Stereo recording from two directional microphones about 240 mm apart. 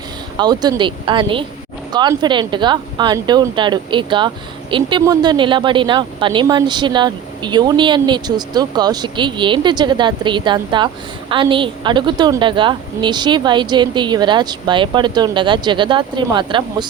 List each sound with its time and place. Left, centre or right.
0.3 s speech: centre